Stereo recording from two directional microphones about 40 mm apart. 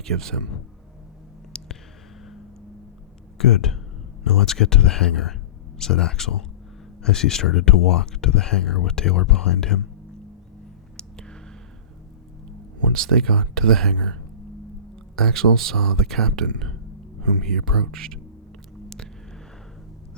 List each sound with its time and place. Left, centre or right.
0.0 s speech: centre
1.5 s a sound: centre
3.3 s speech: centre
10.9 s a sound: centre
12.9 s speech: centre
15.1 s speech: centre